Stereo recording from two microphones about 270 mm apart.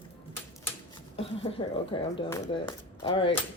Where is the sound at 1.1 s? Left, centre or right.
Left.